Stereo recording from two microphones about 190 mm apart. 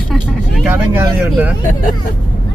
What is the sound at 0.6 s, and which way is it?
Speech, 10° right (ahead or behind).